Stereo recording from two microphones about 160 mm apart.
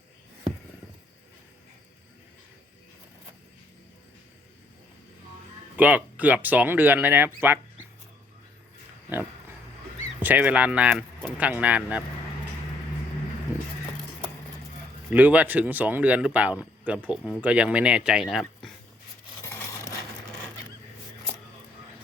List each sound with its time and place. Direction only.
5.7 s speech: 10° right (ahead or behind)
9.1 s pig: 10° right (ahead or behind)
10.2 s speech: 10° right (ahead or behind)
15.1 s speech: 10° right (ahead or behind)
19.5 s a sound: 15° left (ahead or behind)